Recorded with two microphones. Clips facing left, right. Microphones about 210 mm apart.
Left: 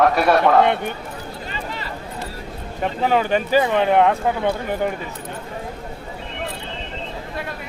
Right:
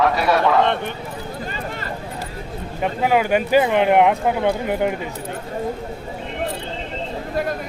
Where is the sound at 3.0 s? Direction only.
10° right (ahead or behind).